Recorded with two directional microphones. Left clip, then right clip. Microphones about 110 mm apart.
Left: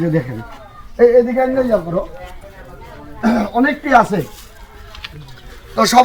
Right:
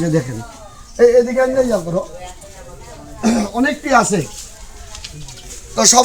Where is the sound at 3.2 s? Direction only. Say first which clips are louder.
Left 2 dB; 30° left (ahead or behind).